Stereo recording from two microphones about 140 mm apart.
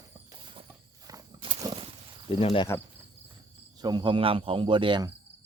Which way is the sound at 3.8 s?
30° right (ahead or behind).